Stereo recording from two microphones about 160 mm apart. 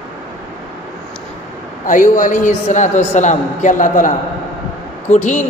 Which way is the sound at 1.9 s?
55° left (ahead or behind).